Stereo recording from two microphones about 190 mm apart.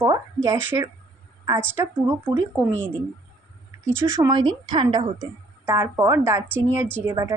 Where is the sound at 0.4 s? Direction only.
15° right (ahead or behind).